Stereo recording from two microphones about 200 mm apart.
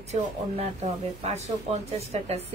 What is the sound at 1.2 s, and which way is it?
A woman's voice, 35° right (ahead or behind).